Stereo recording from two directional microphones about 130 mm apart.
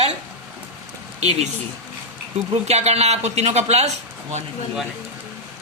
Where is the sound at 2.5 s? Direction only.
55° right (ahead or behind).